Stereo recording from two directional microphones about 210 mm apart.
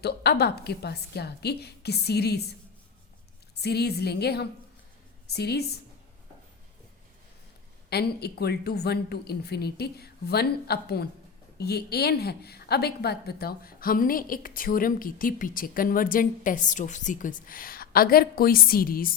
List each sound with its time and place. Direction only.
0.0 s a woman's voice: 50° left (ahead or behind)
7.9 s a woman's voice: 50° left (ahead or behind)